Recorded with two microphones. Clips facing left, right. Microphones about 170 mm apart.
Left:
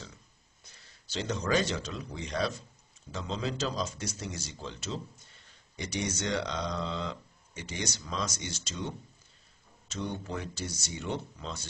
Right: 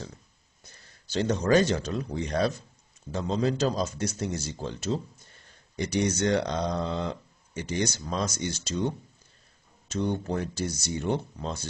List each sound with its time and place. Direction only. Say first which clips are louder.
0.7 s a man's voice: right 3 dB; 50° right (ahead or behind)
9.9 s speech: right 7 dB; 50° right (ahead or behind)